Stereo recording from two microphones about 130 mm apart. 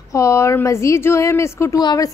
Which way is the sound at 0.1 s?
25° left (ahead or behind).